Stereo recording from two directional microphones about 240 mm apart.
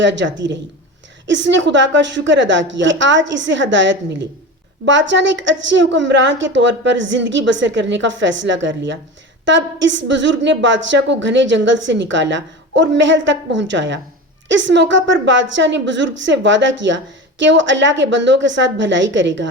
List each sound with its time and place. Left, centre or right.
0.0 s a woman's voice: right